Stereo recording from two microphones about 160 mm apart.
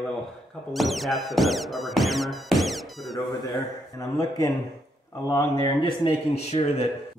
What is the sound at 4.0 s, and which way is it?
Speech, 20° left (ahead or behind).